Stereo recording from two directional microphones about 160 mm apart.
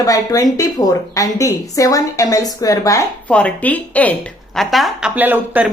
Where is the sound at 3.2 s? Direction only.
10° left (ahead or behind).